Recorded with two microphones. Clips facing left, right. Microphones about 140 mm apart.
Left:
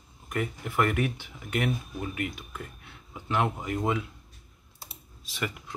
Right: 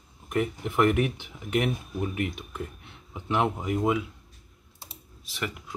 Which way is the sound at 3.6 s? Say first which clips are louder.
Right 3 dB; 5° right (ahead or behind).